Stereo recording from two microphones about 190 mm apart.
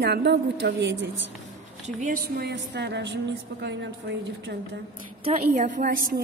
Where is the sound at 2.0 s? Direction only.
45° right (ahead or behind); by 3.7 s 65° right (ahead or behind).